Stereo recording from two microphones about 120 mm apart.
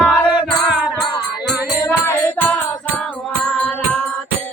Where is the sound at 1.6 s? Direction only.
20° left (ahead or behind); by 4.0 s 5° left (ahead or behind).